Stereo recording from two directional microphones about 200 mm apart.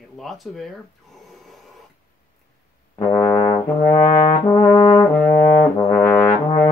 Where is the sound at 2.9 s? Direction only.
15° left (ahead or behind).